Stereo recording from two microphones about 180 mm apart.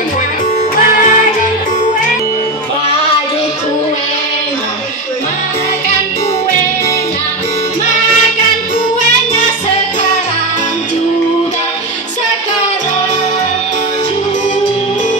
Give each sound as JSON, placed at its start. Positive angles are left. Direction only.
{"t": 0.9, "sound": "music", "side_deg": 45}